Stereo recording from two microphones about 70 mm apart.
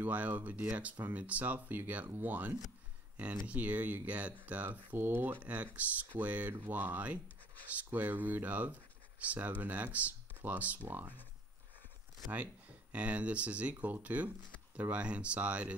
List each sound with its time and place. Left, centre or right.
0.0 s speech: right
12.9 s speech: centre